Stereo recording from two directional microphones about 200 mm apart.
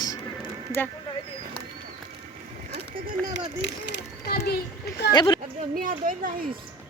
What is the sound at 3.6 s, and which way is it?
Speech, 60° left (ahead or behind).